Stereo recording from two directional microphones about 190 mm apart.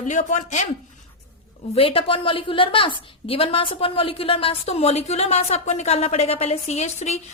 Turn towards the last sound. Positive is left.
turn(degrees=35)  # may be behind; listen again after turning